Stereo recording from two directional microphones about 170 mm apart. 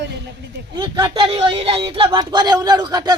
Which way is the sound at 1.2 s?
35° right (ahead or behind).